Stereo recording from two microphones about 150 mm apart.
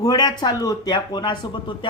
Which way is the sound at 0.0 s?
25° left (ahead or behind).